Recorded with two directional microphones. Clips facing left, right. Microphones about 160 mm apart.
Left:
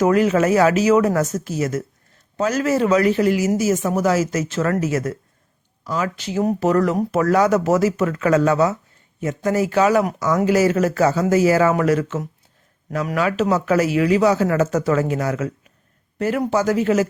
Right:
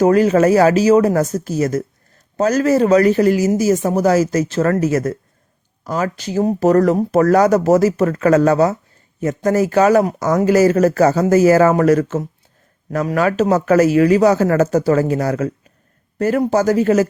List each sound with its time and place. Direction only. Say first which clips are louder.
0.0 s speech: right 4 dB; 35° right (ahead or behind)